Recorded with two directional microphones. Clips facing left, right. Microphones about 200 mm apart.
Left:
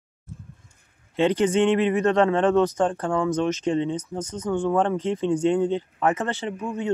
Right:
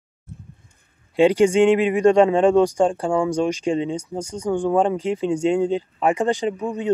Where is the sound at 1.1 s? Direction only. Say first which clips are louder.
Right 5 dB; 10° right (ahead or behind).